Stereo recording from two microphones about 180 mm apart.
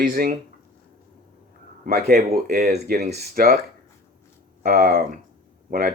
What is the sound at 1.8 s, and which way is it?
Speech, 60° right (ahead or behind).